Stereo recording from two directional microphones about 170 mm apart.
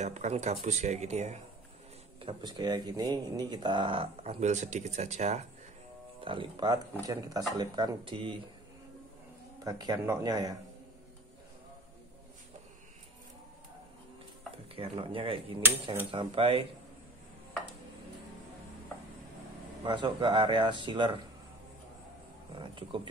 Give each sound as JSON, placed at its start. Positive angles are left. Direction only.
{"t": 0.0, "sound": "speech", "side_deg": -45}
{"t": 2.1, "sound": "speech", "side_deg": -30}
{"t": 6.2, "sound": "speech", "side_deg": -30}
{"t": 9.7, "sound": "speech", "side_deg": -20}
{"t": 14.8, "sound": "speech", "side_deg": -30}
{"t": 19.8, "sound": "speech", "side_deg": -25}
{"t": 22.5, "sound": "speech", "side_deg": -30}